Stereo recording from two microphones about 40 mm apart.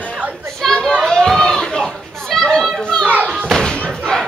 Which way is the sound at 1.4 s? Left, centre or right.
Left.